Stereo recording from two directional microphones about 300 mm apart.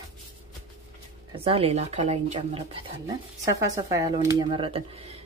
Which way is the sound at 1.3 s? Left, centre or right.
Centre.